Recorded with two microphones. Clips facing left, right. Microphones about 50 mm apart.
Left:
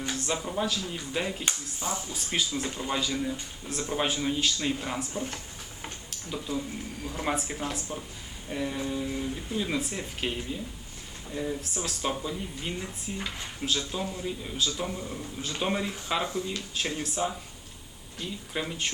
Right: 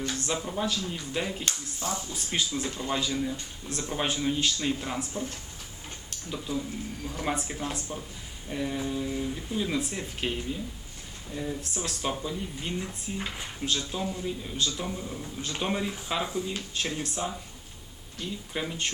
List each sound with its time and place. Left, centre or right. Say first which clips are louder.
0.1 s speech: even; centre
1.8 s speech: even; centre
2.1 s speech: even; centre
6.1 s tick-tock: even; centre
7.0 s speech: left 1 dB; centre